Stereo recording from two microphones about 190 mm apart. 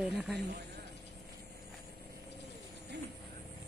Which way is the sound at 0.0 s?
Centre (ahead or behind).